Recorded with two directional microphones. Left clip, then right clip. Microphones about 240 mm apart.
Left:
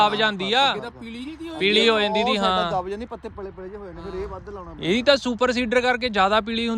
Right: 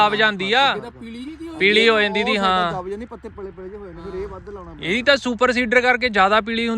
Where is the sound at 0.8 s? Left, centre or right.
Centre.